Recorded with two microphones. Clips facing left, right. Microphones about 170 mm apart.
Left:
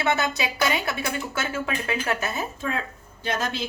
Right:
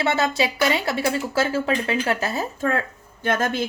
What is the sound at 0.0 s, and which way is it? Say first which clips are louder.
Speech: right 3 dB; 30° right (ahead or behind).